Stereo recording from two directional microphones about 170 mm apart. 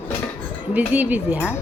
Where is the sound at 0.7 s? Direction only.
10° right (ahead or behind).